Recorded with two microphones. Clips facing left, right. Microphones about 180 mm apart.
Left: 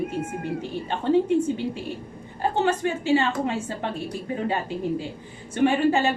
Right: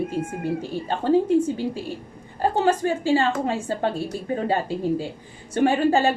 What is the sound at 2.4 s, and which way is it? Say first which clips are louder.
A woman's voice: right 3 dB; 35° right (ahead or behind).